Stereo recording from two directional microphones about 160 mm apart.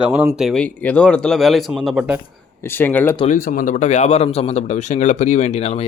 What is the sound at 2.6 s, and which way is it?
Speech, 15° left (ahead or behind).